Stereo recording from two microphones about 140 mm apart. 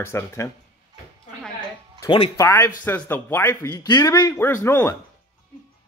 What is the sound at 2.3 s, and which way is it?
Speech, 20° left (ahead or behind).